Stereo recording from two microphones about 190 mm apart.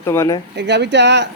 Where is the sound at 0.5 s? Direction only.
65° right (ahead or behind).